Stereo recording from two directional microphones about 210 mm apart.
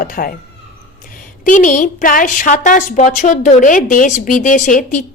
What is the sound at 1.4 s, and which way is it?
A woman's voice, 40° left (ahead or behind).